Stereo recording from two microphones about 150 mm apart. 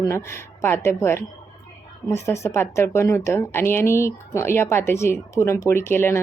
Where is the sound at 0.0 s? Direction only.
20° left (ahead or behind).